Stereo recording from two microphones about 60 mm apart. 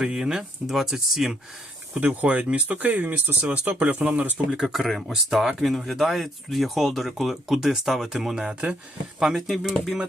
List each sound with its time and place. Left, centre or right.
0.0 s speech: centre
2.0 s speech: right
4.5 s speech: centre